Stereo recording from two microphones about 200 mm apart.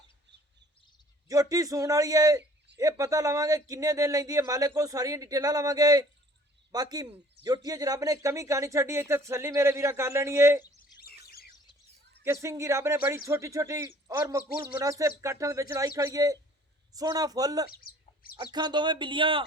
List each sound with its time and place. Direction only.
1.3 s speech: 15° right (ahead or behind)
11.0 s bird: 50° left (ahead or behind)
12.2 s speech: 15° right (ahead or behind)
17.7 s speech: 45° left (ahead or behind)
18.5 s speech: 20° right (ahead or behind)